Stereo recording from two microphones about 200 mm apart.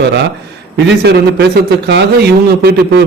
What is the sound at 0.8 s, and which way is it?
A man's voice, 55° right (ahead or behind).